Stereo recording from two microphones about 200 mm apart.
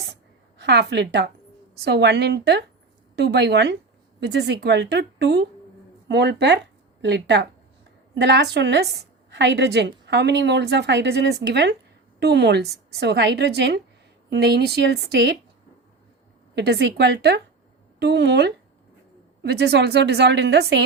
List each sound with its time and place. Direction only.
0.6 s a woman's voice: 55° right (ahead or behind)
16.6 s a woman's voice: 55° right (ahead or behind)